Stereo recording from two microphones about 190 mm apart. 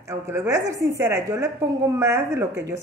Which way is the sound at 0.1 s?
15° right (ahead or behind).